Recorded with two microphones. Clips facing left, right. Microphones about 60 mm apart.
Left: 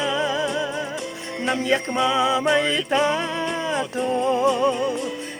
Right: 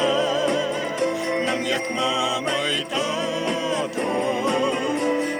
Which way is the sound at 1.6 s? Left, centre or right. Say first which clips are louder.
Left 3 dB; left.